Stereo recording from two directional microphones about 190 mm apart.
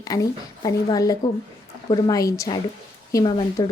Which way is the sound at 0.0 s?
20° left (ahead or behind).